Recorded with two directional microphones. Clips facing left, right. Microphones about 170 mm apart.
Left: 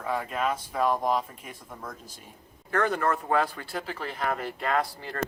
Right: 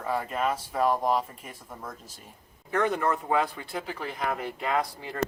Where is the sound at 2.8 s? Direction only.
15° right (ahead or behind).